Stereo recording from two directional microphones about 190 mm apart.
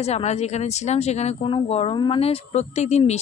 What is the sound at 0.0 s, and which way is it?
Speech, 35° left (ahead or behind).